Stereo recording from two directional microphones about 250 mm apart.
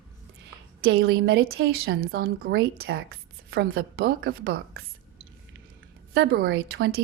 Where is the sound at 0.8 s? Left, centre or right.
Right.